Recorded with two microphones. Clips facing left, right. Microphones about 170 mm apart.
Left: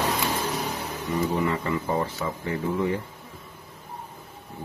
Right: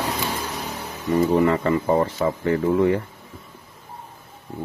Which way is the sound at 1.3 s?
60° right (ahead or behind).